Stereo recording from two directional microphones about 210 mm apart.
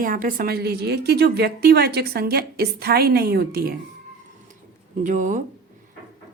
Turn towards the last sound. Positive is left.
turn(degrees=-35)  # may be behind; listen again after turning